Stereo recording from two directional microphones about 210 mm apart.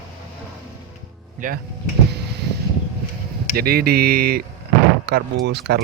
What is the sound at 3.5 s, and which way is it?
Speech, 45° right (ahead or behind).